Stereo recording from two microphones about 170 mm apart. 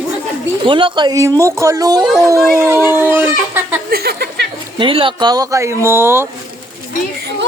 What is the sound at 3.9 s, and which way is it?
Speech, 65° right (ahead or behind).